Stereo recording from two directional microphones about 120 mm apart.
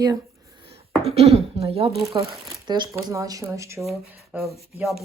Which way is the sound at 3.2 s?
30° right (ahead or behind).